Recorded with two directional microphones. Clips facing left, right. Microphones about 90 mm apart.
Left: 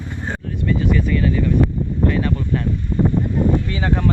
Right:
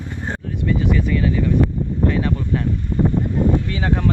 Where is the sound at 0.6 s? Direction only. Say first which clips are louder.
Left 1 dB; 20° right (ahead or behind).